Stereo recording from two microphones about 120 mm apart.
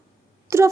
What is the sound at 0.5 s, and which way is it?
Speech, 25° right (ahead or behind).